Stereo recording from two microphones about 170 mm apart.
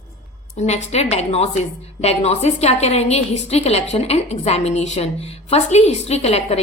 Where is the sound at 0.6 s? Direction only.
40° left (ahead or behind).